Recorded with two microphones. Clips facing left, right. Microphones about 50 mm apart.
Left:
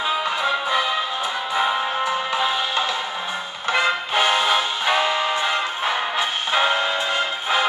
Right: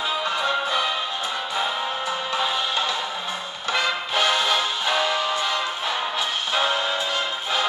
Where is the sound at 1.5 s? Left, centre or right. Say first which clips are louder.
Left 6 dB; centre.